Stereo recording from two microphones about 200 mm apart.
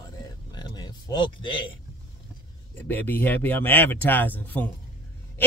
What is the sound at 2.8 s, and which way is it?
Speech, 10° left (ahead or behind).